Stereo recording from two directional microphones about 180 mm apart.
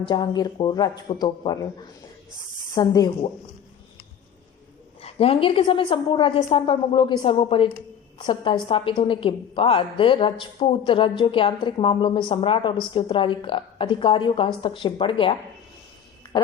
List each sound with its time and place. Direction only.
0.1 s a woman's voice: 25° left (ahead or behind)
2.7 s a woman's voice: 20° left (ahead or behind)
5.0 s a woman's voice: 35° left (ahead or behind)